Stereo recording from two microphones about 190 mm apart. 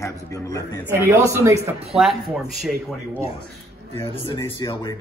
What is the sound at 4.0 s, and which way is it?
Speech, 25° left (ahead or behind).